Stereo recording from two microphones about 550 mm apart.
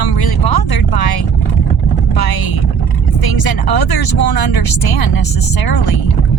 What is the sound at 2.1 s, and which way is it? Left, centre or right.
Boat, left.